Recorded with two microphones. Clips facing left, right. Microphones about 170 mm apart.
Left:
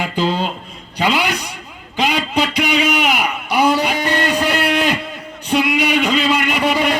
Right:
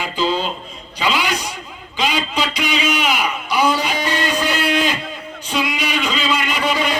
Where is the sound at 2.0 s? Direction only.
60° left (ahead or behind).